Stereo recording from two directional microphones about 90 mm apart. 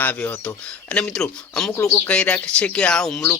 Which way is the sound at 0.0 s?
20° left (ahead or behind).